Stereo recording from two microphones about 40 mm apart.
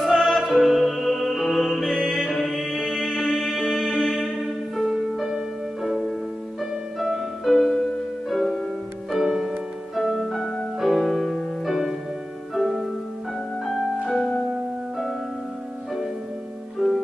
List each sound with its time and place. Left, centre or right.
0.0 s music: centre
7.4 s music: centre
9.1 s music: centre
14.0 s music: centre
16.8 s music: centre